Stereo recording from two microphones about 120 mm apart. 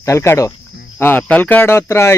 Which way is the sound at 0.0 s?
25° left (ahead or behind).